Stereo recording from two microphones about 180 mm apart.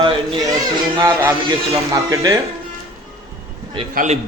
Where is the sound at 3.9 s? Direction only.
40° right (ahead or behind).